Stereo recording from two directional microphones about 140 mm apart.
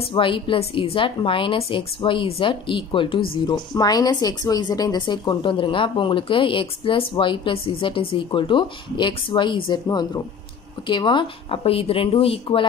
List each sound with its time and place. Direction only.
0.1 s a woman's voice: 40° left (ahead or behind)